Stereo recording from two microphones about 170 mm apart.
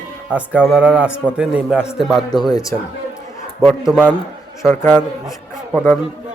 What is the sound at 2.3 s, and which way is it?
Speech, 25° left (ahead or behind).